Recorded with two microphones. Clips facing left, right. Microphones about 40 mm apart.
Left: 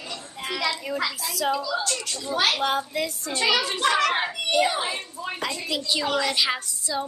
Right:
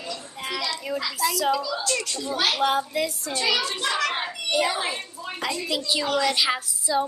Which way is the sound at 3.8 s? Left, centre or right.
Left.